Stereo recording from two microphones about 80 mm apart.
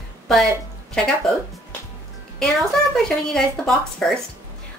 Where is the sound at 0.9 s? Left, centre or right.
Centre.